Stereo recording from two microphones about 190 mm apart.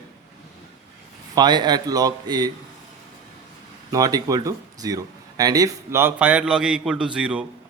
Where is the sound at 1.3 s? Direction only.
20° right (ahead or behind).